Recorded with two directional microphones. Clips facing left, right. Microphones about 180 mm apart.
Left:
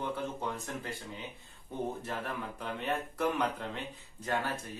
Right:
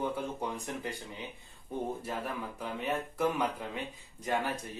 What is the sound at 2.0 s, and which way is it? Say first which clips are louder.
Speech: right 1 dB; 10° right (ahead or behind).